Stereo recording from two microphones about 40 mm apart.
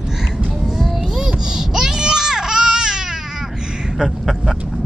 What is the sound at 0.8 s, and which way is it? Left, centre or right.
Baby cry, centre.